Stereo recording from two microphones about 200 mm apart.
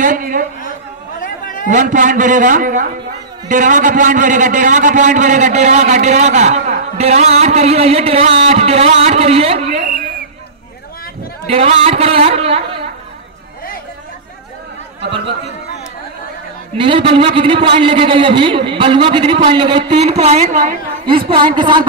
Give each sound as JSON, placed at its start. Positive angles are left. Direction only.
{"t": 0.0, "sound": "a man's voice", "side_deg": -40}
{"t": 1.7, "sound": "a man's voice", "side_deg": -40}
{"t": 11.4, "sound": "a man's voice", "side_deg": -30}
{"t": 16.7, "sound": "a man's voice", "side_deg": -25}
{"t": 21.4, "sound": "a man's voice", "side_deg": -25}